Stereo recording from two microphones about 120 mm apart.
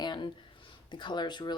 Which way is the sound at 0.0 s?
40° left (ahead or behind).